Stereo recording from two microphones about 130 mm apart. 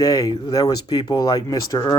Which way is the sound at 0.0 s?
30° left (ahead or behind).